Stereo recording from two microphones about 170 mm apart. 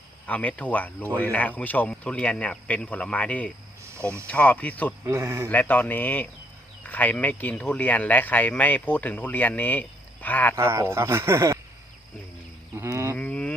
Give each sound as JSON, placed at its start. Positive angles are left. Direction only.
{"t": 0.3, "sound": "speech", "side_deg": 10}
{"t": 5.0, "sound": "speech", "side_deg": -15}
{"t": 5.5, "sound": "speech", "side_deg": 10}
{"t": 10.5, "sound": "speech", "side_deg": -15}
{"t": 12.7, "sound": "a sound", "side_deg": -15}
{"t": 13.1, "sound": "moo", "side_deg": 10}